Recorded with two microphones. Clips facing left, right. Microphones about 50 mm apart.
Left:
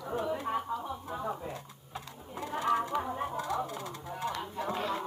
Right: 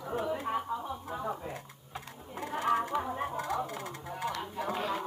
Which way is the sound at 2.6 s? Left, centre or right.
Right.